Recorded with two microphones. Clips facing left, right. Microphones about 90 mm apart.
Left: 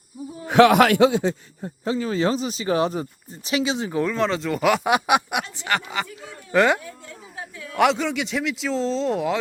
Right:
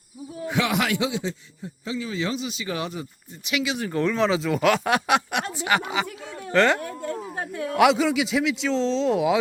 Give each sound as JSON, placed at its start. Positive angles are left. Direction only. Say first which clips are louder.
{"t": 0.4, "sound": "a man's voice", "louder": "left 10 dB", "side_deg": 60}
{"t": 3.8, "sound": "speech", "louder": "even", "side_deg": 5}
{"t": 5.5, "sound": "speech", "louder": "right 3 dB", "side_deg": -10}
{"t": 6.5, "sound": "speech", "louder": "left 1 dB", "side_deg": 10}
{"t": 6.7, "sound": "a woman's voice", "louder": "right 8 dB", "side_deg": -55}
{"t": 7.8, "sound": "speech", "louder": "right 1 dB", "side_deg": -5}